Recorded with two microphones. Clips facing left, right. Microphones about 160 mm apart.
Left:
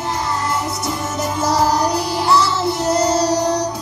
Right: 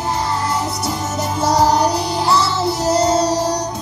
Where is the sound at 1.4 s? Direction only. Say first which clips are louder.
Right 2 dB; 30° right (ahead or behind).